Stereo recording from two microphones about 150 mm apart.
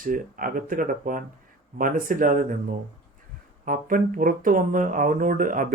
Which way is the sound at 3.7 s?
65° right (ahead or behind).